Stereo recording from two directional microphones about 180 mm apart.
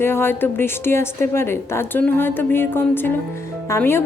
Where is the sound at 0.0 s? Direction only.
15° left (ahead or behind).